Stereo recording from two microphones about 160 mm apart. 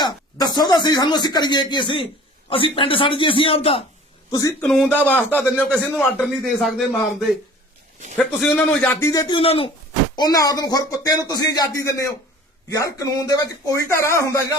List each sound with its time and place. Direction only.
0.0 s a man's voice: 25° left (ahead or behind)
4.3 s speech: 20° left (ahead or behind)
4.6 s a man's voice: 5° left (ahead or behind)
8.2 s a man's voice: centre (ahead or behind); by 9.7 s 35° left (ahead or behind)
10.2 s speech: 25° left (ahead or behind)